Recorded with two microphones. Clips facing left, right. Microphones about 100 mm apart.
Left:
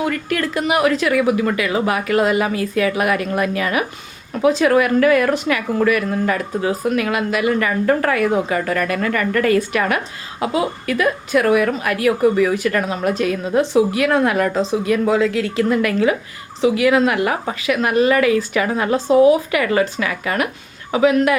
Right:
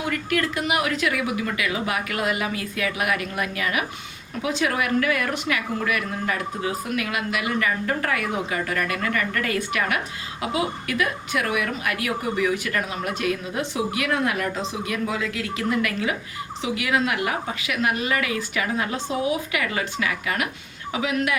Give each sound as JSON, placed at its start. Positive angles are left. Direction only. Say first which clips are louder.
{"t": 0.3, "sound": "a woman's voice", "louder": "left 4 dB", "side_deg": 40}